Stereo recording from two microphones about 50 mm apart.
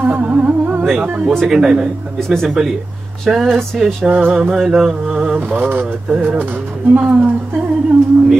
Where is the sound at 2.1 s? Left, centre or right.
Centre.